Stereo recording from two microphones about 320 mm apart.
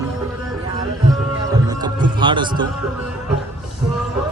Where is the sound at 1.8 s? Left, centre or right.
Centre.